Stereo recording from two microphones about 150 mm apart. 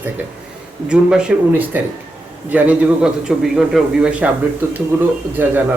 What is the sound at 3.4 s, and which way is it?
A man's voice, 5° right (ahead or behind).